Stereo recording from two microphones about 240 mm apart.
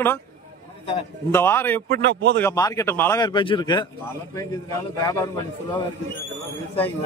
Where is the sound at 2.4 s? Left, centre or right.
Centre.